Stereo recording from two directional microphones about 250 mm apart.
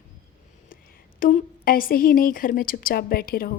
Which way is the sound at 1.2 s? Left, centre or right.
Left.